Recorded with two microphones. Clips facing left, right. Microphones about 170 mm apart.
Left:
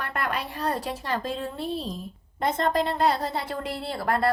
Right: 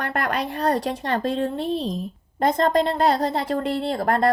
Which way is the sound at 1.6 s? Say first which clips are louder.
Right 5 dB; 90° right.